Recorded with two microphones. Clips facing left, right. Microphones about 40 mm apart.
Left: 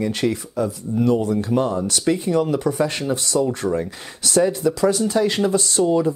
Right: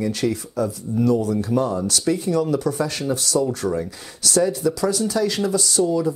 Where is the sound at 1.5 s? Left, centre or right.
Left.